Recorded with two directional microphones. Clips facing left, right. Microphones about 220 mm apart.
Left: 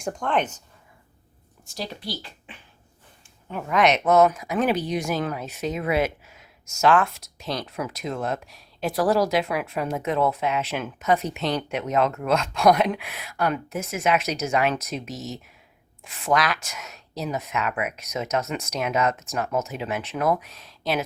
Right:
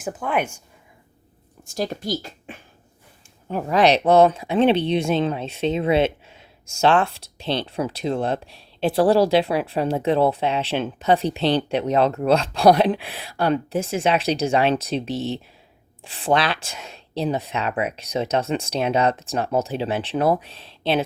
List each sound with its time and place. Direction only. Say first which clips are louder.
0.0 s speech: right 1 dB; 5° right (ahead or behind)
1.6 s speech: right 7 dB; 50° right (ahead or behind)
3.5 s speech: right 4 dB; 35° right (ahead or behind)